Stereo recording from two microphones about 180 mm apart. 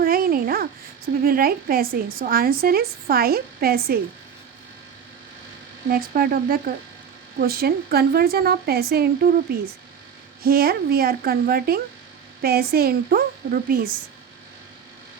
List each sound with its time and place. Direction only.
0.0 s a woman's voice: 55° right (ahead or behind)
5.9 s a woman's voice: 55° right (ahead or behind)